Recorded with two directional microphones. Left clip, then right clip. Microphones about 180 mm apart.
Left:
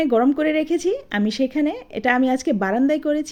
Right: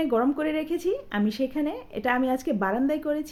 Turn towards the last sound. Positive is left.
turn(degrees=30)  # may be behind; listen again after turning